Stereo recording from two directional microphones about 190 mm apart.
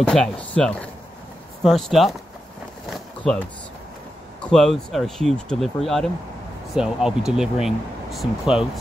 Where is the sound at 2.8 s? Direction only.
Centre (ahead or behind).